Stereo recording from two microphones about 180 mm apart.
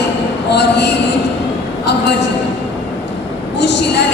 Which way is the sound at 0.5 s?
70° left (ahead or behind).